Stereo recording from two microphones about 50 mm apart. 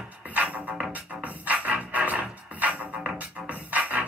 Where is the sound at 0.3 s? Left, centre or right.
Right.